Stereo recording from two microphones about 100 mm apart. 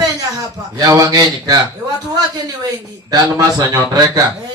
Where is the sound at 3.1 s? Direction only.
40° right (ahead or behind).